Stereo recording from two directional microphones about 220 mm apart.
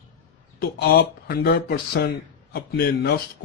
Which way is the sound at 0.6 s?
45° left (ahead or behind).